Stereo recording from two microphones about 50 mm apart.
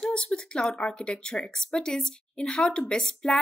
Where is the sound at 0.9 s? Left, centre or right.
Centre.